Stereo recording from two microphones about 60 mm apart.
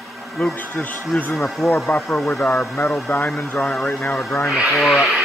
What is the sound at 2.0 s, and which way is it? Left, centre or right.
Speech, centre.